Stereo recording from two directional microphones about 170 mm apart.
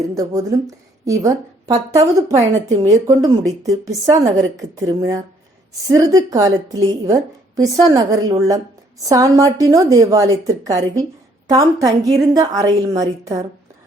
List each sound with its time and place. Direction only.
0.1 s a woman's voice: 20° right (ahead or behind)